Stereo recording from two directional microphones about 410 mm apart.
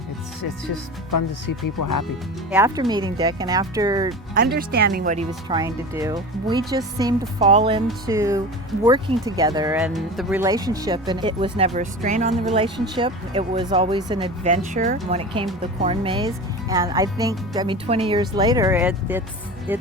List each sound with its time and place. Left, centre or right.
0.4 s speech: left
2.5 s speech: centre
4.4 s speech: right; by 19.2 s centre